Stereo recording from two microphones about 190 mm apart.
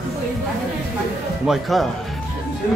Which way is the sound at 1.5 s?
Centre (ahead or behind).